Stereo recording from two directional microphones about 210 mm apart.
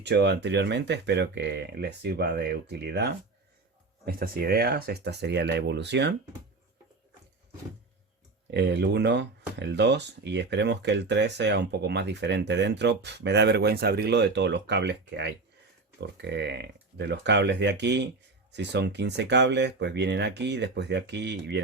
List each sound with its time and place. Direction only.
0.0 s speech: 55° right (ahead or behind)
8.4 s speech: 55° right (ahead or behind)